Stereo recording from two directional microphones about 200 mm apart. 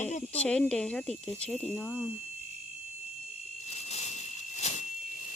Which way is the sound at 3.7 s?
35° left (ahead or behind).